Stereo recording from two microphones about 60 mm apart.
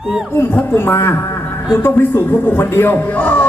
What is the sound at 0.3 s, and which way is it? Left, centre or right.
Speech, left.